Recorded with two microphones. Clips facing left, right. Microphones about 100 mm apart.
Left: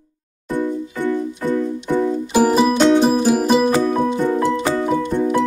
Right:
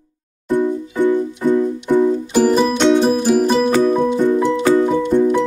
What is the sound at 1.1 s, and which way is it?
Music, 15° right (ahead or behind).